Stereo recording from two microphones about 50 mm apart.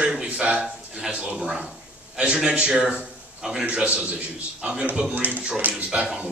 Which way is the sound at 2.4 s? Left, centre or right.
Right.